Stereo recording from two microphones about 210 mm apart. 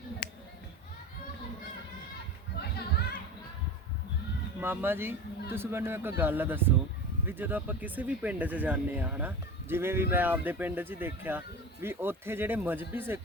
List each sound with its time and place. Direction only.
0.2 s a sound: 45° left (ahead or behind)
2.6 s music: 50° left (ahead or behind)
4.6 s speech: 10° right (ahead or behind)